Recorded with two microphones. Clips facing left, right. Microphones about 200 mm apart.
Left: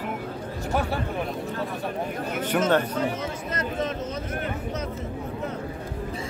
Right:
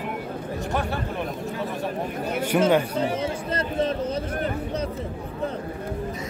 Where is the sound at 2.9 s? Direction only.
30° right (ahead or behind).